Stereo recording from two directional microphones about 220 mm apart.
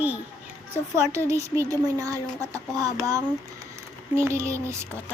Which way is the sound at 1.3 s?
15° right (ahead or behind).